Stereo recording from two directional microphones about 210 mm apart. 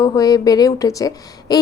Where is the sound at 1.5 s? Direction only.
20° left (ahead or behind).